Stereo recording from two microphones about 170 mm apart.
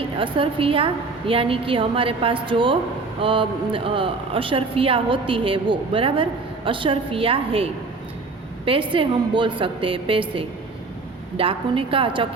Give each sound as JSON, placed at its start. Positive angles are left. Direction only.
{"t": 0.2, "sound": "speech", "side_deg": -30}